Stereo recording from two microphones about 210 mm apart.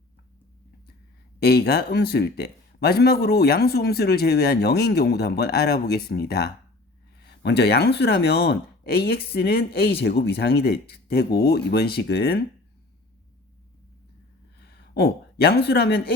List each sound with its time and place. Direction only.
1.4 s speech: 50° left (ahead or behind)
14.6 s speech: 50° left (ahead or behind)